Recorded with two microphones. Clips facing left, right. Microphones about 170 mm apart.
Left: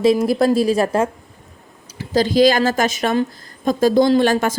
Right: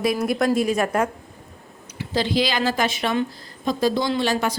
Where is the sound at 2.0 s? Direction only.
40° left (ahead or behind).